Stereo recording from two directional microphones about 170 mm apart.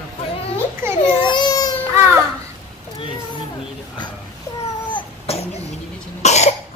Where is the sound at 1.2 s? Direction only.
25° left (ahead or behind).